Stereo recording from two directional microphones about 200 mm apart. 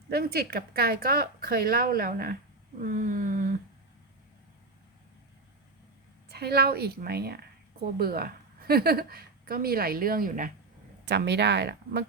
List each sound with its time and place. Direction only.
0.1 s a woman's voice: 50° right (ahead or behind)
2.8 s a sound: 40° right (ahead or behind)
6.2 s a woman's voice: 55° right (ahead or behind)
11.0 s speech: 55° right (ahead or behind)